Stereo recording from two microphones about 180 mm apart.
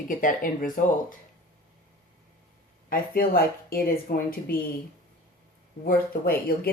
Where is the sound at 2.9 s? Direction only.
55° left (ahead or behind).